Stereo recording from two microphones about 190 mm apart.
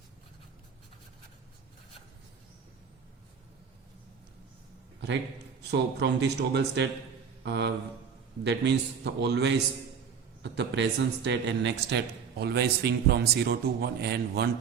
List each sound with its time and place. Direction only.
5.7 s speech: 65° right (ahead or behind)
7.4 s mantra: 65° right (ahead or behind)
8.4 s speech: 65° right (ahead or behind)